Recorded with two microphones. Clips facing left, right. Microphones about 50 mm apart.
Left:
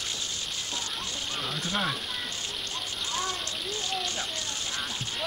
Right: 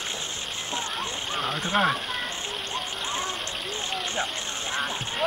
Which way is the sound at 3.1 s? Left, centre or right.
Right.